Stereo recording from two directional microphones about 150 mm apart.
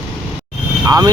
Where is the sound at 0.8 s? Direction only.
20° right (ahead or behind).